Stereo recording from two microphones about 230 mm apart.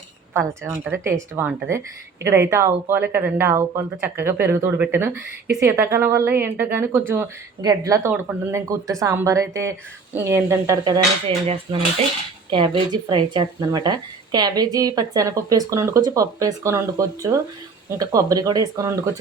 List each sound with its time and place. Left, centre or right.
0.3 s speech: centre